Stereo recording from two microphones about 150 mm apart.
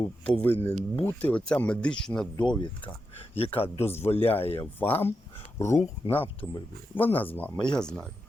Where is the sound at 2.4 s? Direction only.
30° left (ahead or behind).